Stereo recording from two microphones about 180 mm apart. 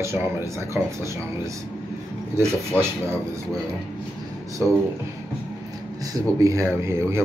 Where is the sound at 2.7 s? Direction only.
10° left (ahead or behind).